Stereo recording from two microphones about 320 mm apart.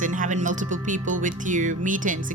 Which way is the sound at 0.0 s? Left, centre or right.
Right.